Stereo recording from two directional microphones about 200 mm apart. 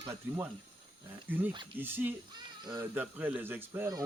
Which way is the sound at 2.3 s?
20° right (ahead or behind).